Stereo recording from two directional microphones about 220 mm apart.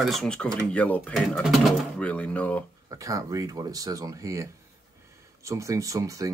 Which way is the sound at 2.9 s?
15° right (ahead or behind).